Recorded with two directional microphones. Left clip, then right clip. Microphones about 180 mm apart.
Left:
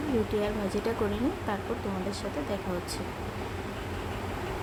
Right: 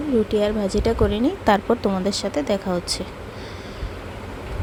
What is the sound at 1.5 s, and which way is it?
Speech, 55° right (ahead or behind).